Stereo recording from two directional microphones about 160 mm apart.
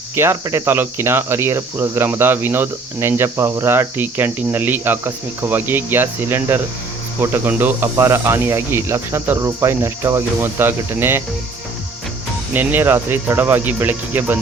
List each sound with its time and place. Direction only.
0.2 s cricket: 15° right (ahead or behind)
12.5 s cricket: 15° right (ahead or behind)